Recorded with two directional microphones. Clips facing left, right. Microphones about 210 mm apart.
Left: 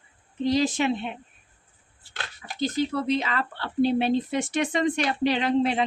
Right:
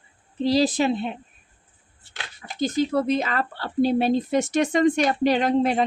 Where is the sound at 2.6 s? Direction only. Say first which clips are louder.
Right 4 dB; 45° right (ahead or behind).